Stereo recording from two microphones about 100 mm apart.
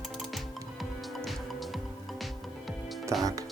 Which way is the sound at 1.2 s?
Centre (ahead or behind).